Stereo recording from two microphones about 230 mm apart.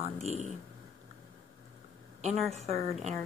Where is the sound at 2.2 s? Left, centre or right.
Right.